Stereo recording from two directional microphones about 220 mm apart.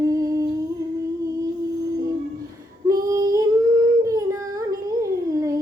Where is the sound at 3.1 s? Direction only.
15° right (ahead or behind).